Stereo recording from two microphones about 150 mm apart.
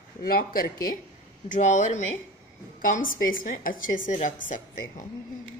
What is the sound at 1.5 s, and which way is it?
Speech, 55° left (ahead or behind).